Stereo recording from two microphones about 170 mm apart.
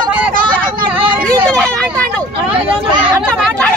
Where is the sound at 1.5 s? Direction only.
5° left (ahead or behind).